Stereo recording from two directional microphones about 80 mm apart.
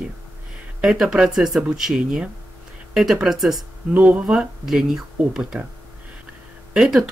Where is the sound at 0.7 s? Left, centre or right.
Centre.